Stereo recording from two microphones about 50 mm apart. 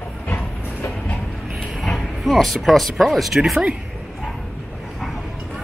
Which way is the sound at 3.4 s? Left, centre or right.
Centre.